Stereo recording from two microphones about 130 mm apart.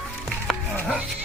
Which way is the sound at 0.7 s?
10° left (ahead or behind).